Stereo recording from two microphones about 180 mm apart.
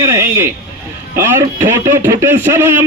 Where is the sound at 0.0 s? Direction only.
15° right (ahead or behind).